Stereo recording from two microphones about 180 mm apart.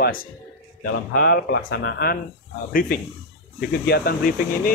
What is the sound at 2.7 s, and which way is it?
Speech, 50° left (ahead or behind).